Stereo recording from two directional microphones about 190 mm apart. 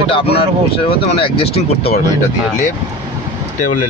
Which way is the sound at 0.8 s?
30° left (ahead or behind).